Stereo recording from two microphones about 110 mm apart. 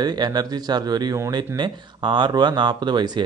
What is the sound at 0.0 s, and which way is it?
Speech, 40° right (ahead or behind).